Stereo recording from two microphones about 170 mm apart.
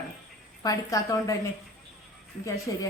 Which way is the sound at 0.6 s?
20° left (ahead or behind).